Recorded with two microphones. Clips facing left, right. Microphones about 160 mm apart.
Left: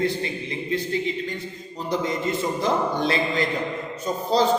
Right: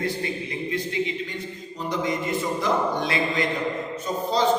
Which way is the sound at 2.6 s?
30° left (ahead or behind).